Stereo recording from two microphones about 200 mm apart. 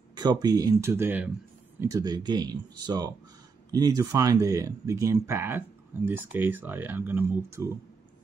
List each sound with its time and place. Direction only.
0.1 s speech: 20° right (ahead or behind)